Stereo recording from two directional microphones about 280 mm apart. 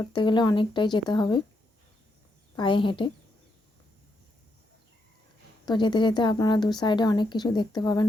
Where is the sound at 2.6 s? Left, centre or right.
Centre.